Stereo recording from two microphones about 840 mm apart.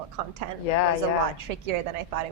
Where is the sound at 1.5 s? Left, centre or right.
Right.